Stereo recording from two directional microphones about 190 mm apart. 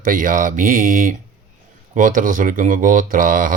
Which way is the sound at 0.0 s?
45° right (ahead or behind).